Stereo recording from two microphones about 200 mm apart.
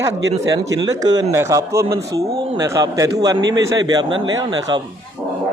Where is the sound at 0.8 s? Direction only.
20° right (ahead or behind).